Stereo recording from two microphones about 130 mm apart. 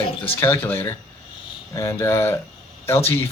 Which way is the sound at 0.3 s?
20° left (ahead or behind).